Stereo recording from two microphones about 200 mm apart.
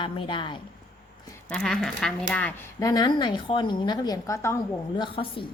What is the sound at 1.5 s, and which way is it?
Speech, centre (ahead or behind).